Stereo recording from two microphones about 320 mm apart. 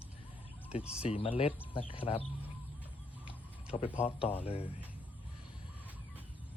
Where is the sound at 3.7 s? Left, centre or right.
Centre.